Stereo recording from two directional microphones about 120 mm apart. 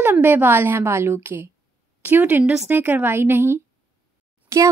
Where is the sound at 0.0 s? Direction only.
15° right (ahead or behind).